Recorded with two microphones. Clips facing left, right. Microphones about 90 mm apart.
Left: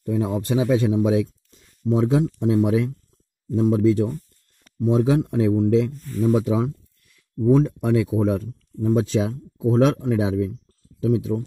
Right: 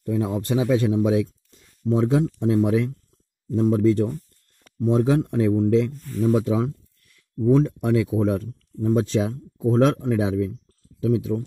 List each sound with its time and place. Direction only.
0.0 s speech: 15° left (ahead or behind)